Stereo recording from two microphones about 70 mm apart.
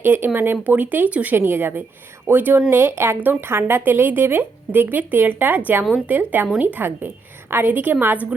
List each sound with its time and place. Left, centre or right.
0.0 s speech: right